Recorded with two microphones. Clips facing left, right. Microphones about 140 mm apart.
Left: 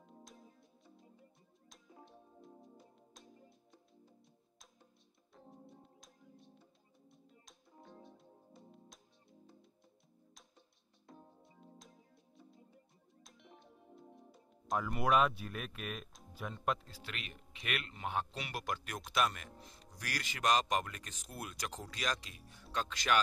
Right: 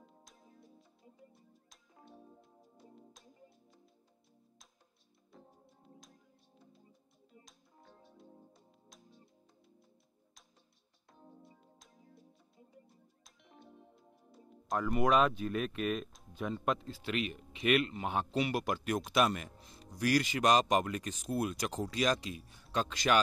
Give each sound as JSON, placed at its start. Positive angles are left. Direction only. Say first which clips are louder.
{"t": 0.0, "sound": "music", "louder": "left 4 dB", "side_deg": 0}
{"t": 1.7, "sound": "music", "louder": "left 1 dB", "side_deg": 0}
{"t": 5.3, "sound": "music", "louder": "left 3 dB", "side_deg": 0}
{"t": 7.4, "sound": "music", "louder": "left 3 dB", "side_deg": 0}
{"t": 11.1, "sound": "music", "louder": "right 1 dB", "side_deg": 0}
{"t": 13.2, "sound": "music", "louder": "even", "side_deg": 0}
{"t": 17.1, "sound": "speech", "louder": "right 13 dB", "side_deg": -10}
{"t": 17.9, "sound": "a man's voice", "louder": "right 6 dB", "side_deg": -20}